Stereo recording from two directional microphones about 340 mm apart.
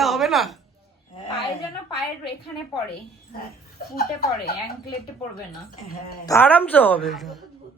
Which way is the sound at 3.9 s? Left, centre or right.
Left.